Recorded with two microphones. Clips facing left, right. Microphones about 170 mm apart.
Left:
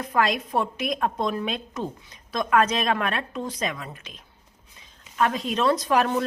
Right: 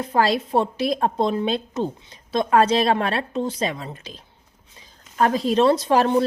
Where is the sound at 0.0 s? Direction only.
30° right (ahead or behind).